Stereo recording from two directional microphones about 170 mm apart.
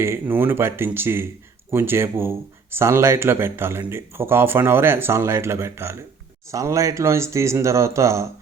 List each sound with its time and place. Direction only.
0.0 s speech: 15° right (ahead or behind)